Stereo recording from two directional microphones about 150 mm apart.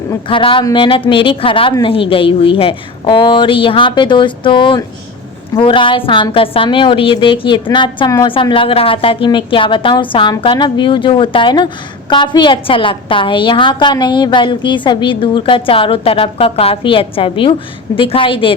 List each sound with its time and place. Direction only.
0.3 s a woman's voice: 35° left (ahead or behind)